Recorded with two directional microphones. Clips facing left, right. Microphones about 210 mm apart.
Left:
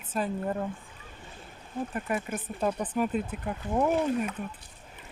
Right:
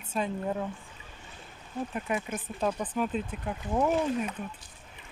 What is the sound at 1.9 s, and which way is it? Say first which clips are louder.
Speech: even; centre (ahead or behind).